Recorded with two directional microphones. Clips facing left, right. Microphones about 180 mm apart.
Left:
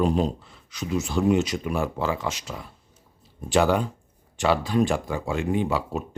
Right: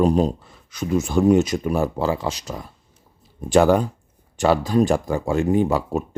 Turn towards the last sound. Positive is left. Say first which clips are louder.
# right 5 dB
turn(degrees=-45)  # may be behind; listen again after turning